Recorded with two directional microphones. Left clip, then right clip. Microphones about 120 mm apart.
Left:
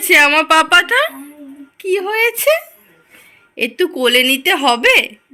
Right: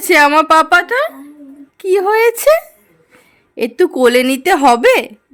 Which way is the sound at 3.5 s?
80° right.